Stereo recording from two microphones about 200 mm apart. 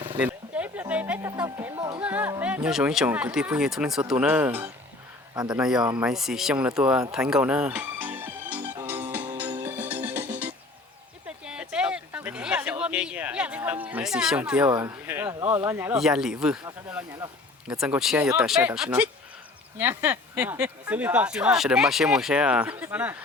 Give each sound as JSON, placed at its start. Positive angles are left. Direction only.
{"t": 0.2, "sound": "a sound", "side_deg": -5}
{"t": 1.5, "sound": "music", "side_deg": -15}
{"t": 2.0, "sound": "music", "side_deg": -5}
{"t": 2.6, "sound": "speech", "side_deg": 0}
{"t": 5.3, "sound": "speech", "side_deg": -20}
{"t": 5.5, "sound": "speech", "side_deg": -5}
{"t": 7.1, "sound": "music", "side_deg": -5}
{"t": 11.3, "sound": "a sound", "side_deg": -5}
{"t": 15.6, "sound": "speech", "side_deg": -10}
{"t": 17.7, "sound": "speech", "side_deg": -5}